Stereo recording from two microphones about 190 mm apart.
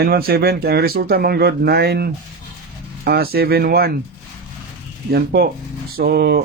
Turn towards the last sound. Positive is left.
turn(degrees=-60)  # may be behind; listen again after turning